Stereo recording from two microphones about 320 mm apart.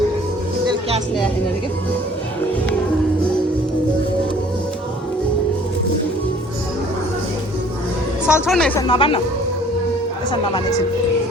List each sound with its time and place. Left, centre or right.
0.7 s music: centre
8.3 s speech: centre
8.9 s speech: centre
10.3 s speech: centre